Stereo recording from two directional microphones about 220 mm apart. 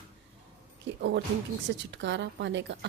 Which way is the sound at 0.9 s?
50° right (ahead or behind).